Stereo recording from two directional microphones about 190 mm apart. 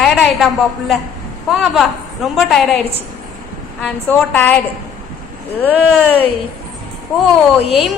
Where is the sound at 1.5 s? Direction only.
Centre (ahead or behind).